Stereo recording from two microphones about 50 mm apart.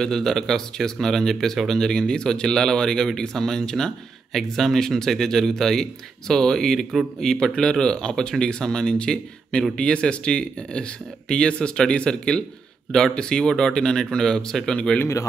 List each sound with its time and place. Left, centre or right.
0.0 s speech: centre